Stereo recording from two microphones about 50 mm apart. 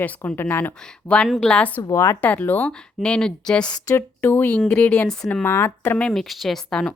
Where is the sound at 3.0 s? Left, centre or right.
Centre.